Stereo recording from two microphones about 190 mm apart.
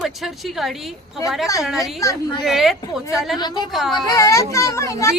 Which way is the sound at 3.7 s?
Centre (ahead or behind).